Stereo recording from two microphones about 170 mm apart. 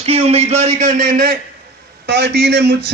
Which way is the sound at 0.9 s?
65° right (ahead or behind).